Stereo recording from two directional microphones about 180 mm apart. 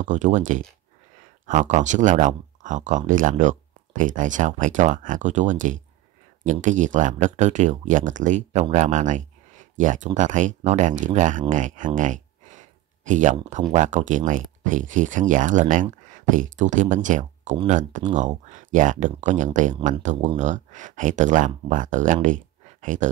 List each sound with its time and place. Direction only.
0.0 s speech: 45° right (ahead or behind)